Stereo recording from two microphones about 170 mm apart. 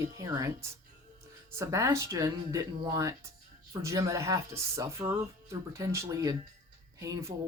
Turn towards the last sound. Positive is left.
turn(degrees=-15)  # may be behind; listen again after turning